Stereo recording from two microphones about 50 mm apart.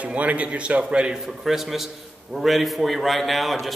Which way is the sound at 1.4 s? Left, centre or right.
Centre.